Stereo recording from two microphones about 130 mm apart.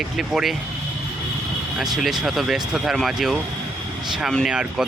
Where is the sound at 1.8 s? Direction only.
Centre (ahead or behind).